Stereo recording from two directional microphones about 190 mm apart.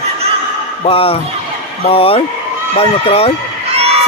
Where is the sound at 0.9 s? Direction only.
30° left (ahead or behind).